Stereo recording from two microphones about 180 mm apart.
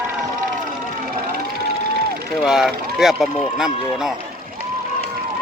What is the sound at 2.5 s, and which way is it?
Speech, 5° right (ahead or behind).